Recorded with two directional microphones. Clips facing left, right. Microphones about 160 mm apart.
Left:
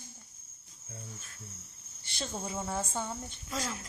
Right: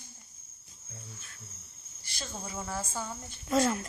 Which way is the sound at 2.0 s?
25° left (ahead or behind).